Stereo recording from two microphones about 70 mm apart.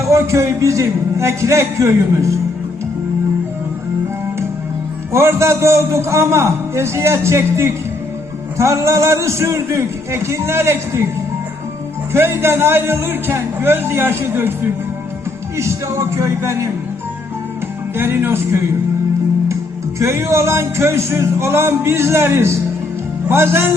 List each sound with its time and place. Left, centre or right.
0.0 s a man's voice: right
5.1 s a man's voice: right
12.1 s a man's voice: right
15.5 s a man's voice: right
17.9 s a man's voice: right
20.0 s a man's voice: right